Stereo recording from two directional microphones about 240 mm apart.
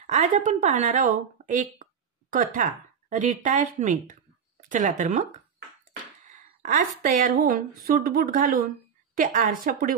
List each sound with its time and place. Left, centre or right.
0.0 s a woman's voice: right
6.2 s speech: right